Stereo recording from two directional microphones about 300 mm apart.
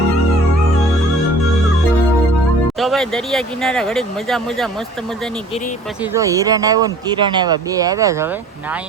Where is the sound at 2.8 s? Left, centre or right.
Centre.